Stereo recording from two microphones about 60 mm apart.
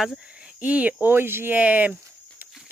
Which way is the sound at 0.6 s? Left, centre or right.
Right.